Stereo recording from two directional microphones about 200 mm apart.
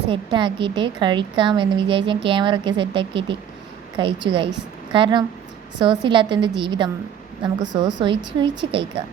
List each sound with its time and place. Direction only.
0.1 s a woman's voice: 25° right (ahead or behind)